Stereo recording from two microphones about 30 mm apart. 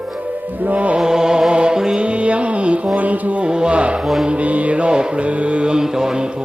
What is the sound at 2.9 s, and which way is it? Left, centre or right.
Music, right.